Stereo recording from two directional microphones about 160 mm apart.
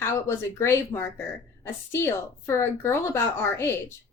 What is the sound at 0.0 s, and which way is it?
A woman's voice, 15° left (ahead or behind).